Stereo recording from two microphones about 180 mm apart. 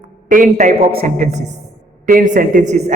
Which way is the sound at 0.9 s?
50° right (ahead or behind).